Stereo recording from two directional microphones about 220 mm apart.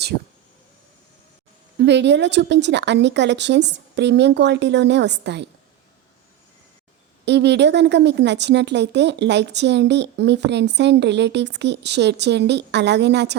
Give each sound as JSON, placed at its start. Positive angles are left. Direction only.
{"t": 1.8, "sound": "a woman's voice", "side_deg": -50}
{"t": 7.3, "sound": "a woman's voice", "side_deg": -50}